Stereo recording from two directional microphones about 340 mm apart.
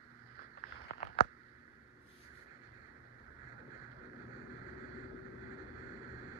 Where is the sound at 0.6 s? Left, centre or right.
Left.